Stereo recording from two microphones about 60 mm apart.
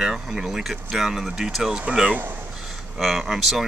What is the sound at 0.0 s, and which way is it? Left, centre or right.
Speech, centre.